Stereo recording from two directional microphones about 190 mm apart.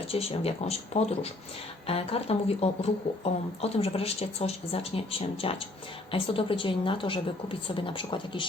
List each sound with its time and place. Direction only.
0.1 s a woman's voice: 30° left (ahead or behind)